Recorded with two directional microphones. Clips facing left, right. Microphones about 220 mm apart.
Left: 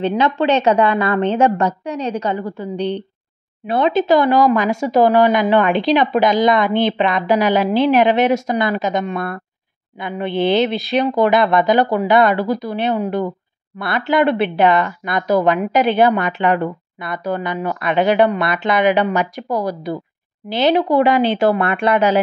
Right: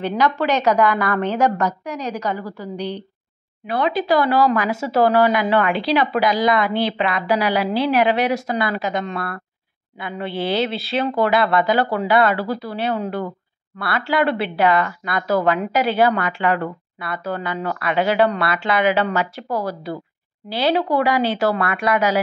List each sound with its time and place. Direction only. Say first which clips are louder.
0.0 s a woman's voice: left 3 dB; 25° left (ahead or behind)